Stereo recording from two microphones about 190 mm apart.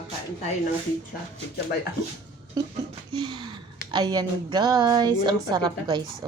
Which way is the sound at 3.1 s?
20° right (ahead or behind).